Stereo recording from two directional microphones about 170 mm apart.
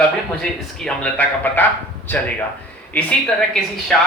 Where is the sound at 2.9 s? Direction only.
5° left (ahead or behind).